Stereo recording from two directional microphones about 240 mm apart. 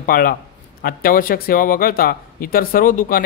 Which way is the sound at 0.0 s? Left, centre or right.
Left.